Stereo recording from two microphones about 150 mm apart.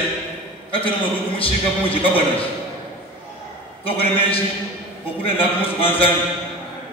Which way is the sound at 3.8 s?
40° left (ahead or behind).